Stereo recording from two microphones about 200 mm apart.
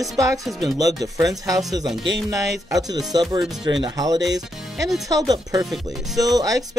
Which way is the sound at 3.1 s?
20° right (ahead or behind).